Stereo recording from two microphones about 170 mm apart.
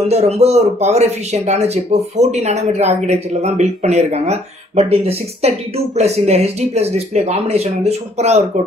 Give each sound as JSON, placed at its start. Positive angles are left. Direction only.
{"t": 0.1, "sound": "speech", "side_deg": -40}